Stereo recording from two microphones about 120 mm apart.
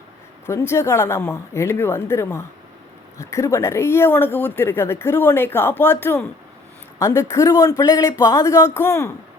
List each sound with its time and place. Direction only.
0.4 s speech: 20° left (ahead or behind)